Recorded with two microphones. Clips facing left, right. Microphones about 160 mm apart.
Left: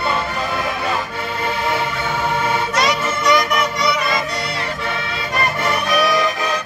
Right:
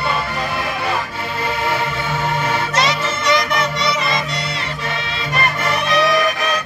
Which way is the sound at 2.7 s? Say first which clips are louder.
Even; 25° right (ahead or behind).